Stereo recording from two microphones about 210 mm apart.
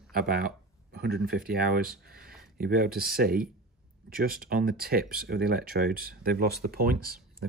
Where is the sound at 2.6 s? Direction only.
45° right (ahead or behind).